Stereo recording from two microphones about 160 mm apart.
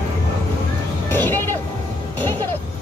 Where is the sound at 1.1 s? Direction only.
15° left (ahead or behind).